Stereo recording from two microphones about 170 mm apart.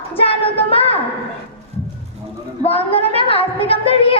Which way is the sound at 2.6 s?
35° left (ahead or behind).